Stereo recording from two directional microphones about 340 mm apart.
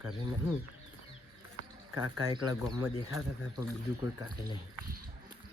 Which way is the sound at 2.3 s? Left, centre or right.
Centre.